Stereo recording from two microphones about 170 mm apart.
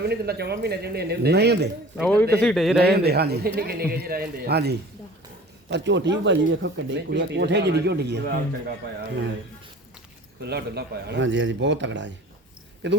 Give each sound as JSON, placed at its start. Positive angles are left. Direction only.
{"t": 0.0, "sound": "a man's voice", "side_deg": -70}
{"t": 2.0, "sound": "a man's voice", "side_deg": 10}
{"t": 2.8, "sound": "a man's voice", "side_deg": -70}
{"t": 5.6, "sound": "speech", "side_deg": -90}
{"t": 10.4, "sound": "speech", "side_deg": -75}